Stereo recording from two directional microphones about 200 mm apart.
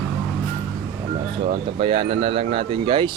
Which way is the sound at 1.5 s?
25° right (ahead or behind).